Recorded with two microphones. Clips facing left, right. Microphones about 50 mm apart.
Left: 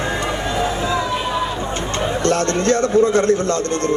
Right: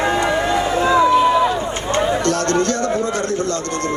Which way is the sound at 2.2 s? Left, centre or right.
Left.